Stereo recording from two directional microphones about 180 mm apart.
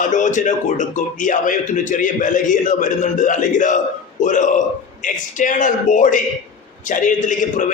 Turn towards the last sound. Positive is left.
turn(degrees=45)  # may be behind; listen again after turning